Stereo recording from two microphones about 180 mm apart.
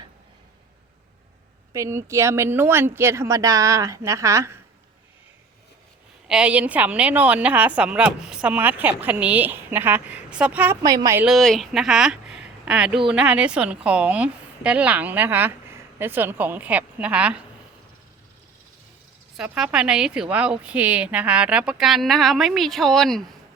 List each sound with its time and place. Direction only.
1.7 s a woman's voice: 15° right (ahead or behind)
6.2 s a woman's voice: 5° right (ahead or behind)
10.8 s a woman's voice: 20° right (ahead or behind)
11.3 s a woman's voice: centre (ahead or behind)
19.4 s a woman's voice: 5° right (ahead or behind)